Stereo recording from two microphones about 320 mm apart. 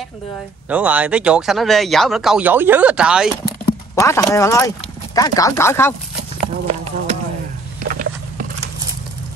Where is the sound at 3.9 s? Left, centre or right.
Centre.